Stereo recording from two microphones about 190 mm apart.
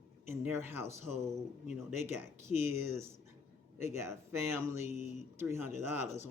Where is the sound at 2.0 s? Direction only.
10° right (ahead or behind).